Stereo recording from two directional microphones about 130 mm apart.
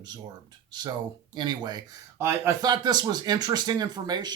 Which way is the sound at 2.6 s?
30° right (ahead or behind).